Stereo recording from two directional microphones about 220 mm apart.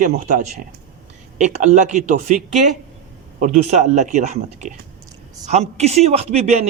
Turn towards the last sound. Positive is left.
turn(degrees=-30)  # may be behind; listen again after turning